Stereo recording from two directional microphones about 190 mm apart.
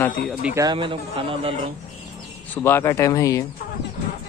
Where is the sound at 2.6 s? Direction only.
15° left (ahead or behind).